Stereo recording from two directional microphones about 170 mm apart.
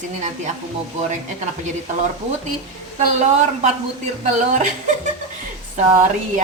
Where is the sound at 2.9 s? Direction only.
40° right (ahead or behind).